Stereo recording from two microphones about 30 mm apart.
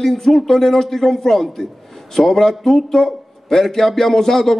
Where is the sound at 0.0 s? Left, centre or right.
Centre.